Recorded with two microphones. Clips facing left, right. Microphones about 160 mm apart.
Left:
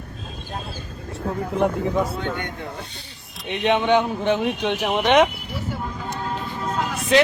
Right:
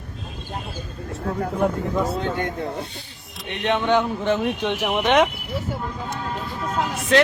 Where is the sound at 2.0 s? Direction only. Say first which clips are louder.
Right 3 dB; 30° right (ahead or behind).